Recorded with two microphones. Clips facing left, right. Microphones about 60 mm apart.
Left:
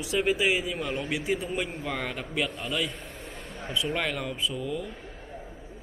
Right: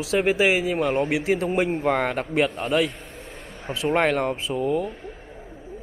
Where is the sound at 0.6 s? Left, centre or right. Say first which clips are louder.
Right 9 dB; right.